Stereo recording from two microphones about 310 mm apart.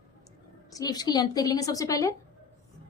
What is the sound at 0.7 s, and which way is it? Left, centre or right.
A woman's voice, centre.